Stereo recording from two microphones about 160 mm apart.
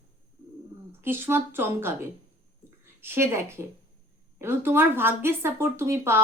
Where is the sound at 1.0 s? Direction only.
15° right (ahead or behind).